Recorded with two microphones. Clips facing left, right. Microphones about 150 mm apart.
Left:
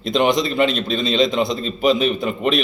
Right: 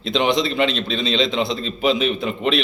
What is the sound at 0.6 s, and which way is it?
Speech, 45° left (ahead or behind).